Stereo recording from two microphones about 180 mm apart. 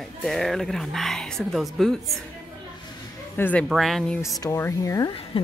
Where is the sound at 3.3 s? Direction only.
10° left (ahead or behind).